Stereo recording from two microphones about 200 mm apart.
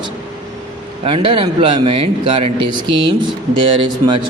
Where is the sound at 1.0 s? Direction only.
25° right (ahead or behind).